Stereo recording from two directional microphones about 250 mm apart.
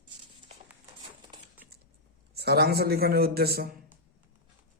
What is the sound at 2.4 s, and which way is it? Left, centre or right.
A man's voice, right.